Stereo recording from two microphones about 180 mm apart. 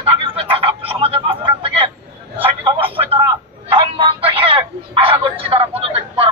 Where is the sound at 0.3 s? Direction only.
30° right (ahead or behind).